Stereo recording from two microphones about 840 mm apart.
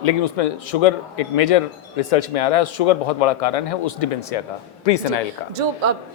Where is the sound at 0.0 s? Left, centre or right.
Left.